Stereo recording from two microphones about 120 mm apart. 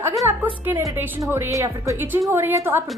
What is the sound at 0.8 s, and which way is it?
A woman's voice, 15° right (ahead or behind).